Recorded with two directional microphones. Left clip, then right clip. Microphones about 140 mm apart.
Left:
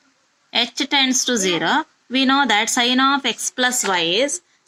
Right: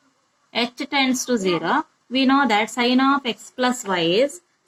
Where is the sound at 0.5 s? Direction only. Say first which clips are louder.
Left 4 dB; 45° left (ahead or behind).